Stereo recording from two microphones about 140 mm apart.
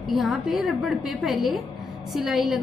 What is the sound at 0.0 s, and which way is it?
A woman's voice, centre (ahead or behind).